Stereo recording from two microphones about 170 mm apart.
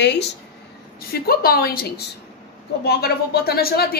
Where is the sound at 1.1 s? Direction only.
65° left (ahead or behind).